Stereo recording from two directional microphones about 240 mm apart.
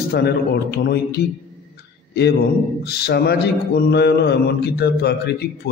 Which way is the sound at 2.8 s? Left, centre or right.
Left.